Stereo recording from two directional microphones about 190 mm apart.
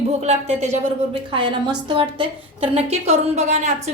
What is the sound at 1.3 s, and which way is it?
A woman's voice, 25° right (ahead or behind).